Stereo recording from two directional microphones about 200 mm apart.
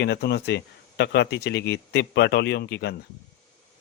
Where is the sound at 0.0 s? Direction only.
55° left (ahead or behind).